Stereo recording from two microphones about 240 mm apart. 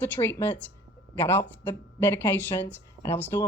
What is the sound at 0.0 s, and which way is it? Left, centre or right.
Speech, centre.